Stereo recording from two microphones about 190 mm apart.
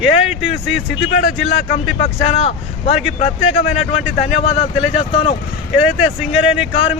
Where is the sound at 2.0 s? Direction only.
30° left (ahead or behind).